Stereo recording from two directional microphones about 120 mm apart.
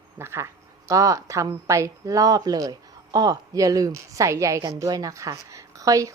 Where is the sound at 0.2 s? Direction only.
20° right (ahead or behind).